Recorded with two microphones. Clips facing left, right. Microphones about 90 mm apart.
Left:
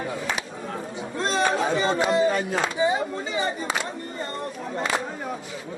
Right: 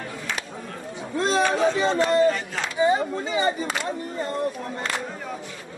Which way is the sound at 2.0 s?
5° left (ahead or behind).